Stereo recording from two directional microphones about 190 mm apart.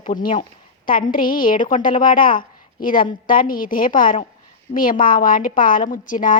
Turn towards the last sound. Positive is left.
turn(degrees=45)  # may be behind; listen again after turning